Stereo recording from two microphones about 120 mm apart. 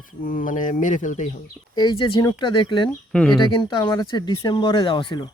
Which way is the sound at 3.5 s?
40° left (ahead or behind).